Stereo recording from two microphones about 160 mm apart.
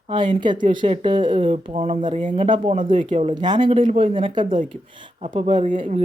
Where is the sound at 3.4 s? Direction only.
25° right (ahead or behind).